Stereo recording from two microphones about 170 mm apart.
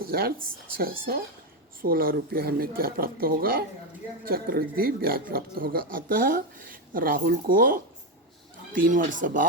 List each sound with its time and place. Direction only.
0.1 s speech: 65° right (ahead or behind)